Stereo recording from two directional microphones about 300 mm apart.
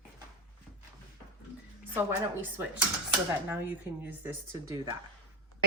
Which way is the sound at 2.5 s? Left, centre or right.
Centre.